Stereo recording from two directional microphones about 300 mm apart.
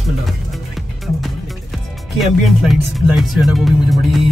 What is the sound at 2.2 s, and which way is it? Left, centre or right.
Speech, centre.